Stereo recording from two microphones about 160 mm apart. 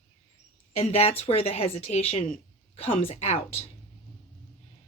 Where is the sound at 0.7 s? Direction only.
40° left (ahead or behind).